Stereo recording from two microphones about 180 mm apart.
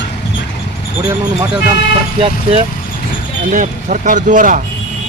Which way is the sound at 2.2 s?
30° right (ahead or behind).